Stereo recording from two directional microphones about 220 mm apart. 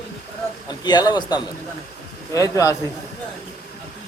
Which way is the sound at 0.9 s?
20° left (ahead or behind).